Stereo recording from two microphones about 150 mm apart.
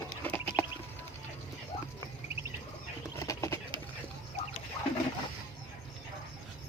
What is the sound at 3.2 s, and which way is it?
Bird, 20° left (ahead or behind).